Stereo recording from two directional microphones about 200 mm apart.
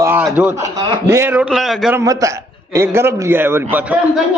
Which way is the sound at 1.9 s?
15° right (ahead or behind).